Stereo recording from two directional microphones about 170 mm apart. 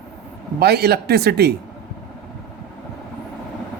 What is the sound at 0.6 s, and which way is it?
Speech, 70° right (ahead or behind).